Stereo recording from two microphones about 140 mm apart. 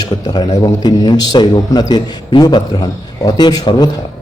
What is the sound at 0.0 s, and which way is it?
A man's voice, 30° left (ahead or behind).